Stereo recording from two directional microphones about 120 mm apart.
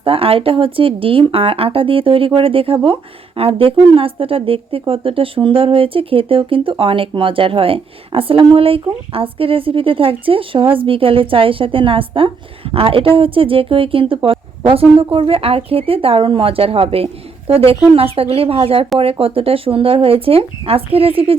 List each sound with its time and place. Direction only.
0.0 s speech: 50° right (ahead or behind)